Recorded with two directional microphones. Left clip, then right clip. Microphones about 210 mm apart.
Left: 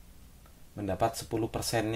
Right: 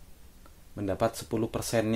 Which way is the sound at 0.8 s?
35° right (ahead or behind).